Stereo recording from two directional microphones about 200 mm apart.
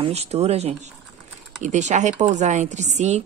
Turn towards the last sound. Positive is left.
turn(degrees=-35)  # may be behind; listen again after turning